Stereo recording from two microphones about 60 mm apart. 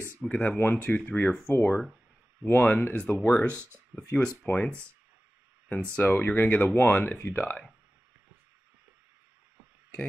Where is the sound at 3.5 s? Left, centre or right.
Right.